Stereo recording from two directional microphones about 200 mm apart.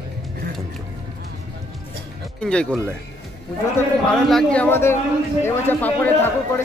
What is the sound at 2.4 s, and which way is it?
Speech, 5° left (ahead or behind).